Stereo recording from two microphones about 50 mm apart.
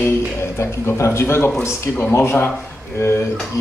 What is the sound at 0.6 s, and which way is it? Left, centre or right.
Speech, left.